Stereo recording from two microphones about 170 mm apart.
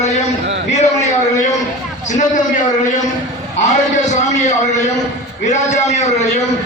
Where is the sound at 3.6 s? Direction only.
45° left (ahead or behind).